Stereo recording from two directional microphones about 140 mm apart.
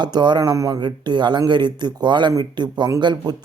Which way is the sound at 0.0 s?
30° right (ahead or behind).